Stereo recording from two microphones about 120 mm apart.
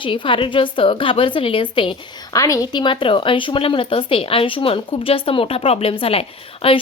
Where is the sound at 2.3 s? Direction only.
30° left (ahead or behind); by 6.8 s 50° left (ahead or behind).